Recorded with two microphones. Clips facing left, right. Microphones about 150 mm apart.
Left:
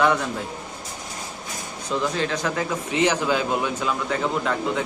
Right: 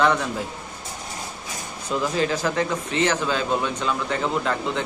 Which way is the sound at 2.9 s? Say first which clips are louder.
Left 4 dB; 15° left (ahead or behind).